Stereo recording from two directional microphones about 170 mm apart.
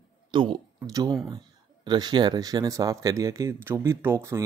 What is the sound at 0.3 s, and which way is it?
Speech, 25° right (ahead or behind).